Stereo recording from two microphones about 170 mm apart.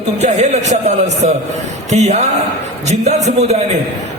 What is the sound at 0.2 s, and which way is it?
A man's voice, 40° right (ahead or behind).